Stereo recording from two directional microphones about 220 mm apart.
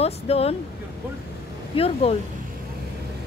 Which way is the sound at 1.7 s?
25° left (ahead or behind).